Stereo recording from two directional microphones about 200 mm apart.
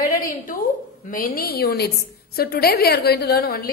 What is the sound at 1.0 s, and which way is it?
A woman's voice, 45° left (ahead or behind).